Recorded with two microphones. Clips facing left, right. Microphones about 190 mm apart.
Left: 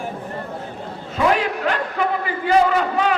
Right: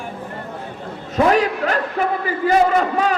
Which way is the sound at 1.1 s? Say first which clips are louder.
Right 3 dB; 40° right (ahead or behind).